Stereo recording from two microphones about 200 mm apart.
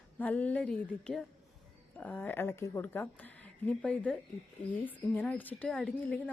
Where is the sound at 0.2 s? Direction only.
5° left (ahead or behind).